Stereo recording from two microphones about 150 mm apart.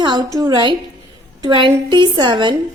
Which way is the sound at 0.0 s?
25° right (ahead or behind).